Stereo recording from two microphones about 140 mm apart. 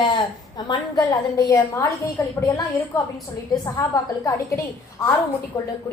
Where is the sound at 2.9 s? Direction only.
25° left (ahead or behind).